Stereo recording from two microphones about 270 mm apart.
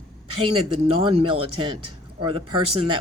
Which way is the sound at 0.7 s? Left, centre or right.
Right.